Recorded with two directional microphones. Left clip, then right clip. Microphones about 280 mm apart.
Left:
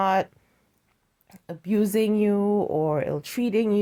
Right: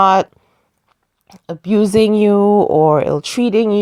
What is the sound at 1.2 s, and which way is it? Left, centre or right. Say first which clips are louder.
Speech: right 10 dB; centre.